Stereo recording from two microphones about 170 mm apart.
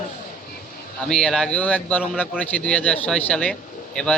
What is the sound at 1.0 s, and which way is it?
Speech, 5° left (ahead or behind).